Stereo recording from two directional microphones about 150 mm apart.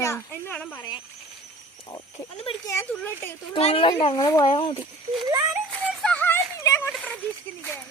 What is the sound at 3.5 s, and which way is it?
A child's voice, 40° left (ahead or behind).